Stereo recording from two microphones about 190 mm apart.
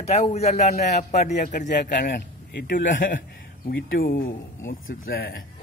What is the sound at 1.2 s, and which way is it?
Speech, 55° left (ahead or behind).